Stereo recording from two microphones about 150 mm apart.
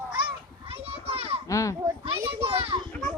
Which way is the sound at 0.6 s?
40° right (ahead or behind).